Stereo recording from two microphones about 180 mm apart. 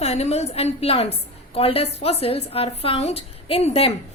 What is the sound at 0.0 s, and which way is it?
A woman's voice, 35° left (ahead or behind).